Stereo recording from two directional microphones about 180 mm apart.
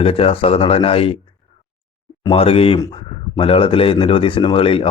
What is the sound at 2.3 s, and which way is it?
Speech, 30° left (ahead or behind).